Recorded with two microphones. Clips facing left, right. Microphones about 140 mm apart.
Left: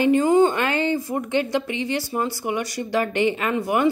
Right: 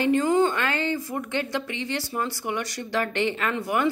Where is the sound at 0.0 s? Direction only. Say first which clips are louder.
Left 4 dB; 15° left (ahead or behind).